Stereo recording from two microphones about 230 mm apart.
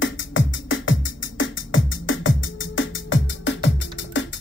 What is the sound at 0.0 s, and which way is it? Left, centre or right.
Music, left.